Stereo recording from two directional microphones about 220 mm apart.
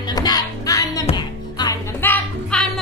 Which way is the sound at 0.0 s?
15° left (ahead or behind).